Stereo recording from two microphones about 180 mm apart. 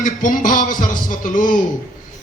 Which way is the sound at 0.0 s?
50° left (ahead or behind).